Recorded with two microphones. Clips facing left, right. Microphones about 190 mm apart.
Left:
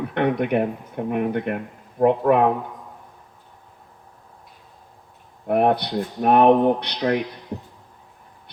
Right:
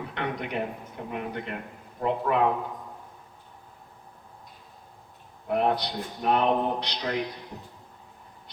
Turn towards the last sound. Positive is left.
turn(degrees=55)  # may be behind; listen again after turning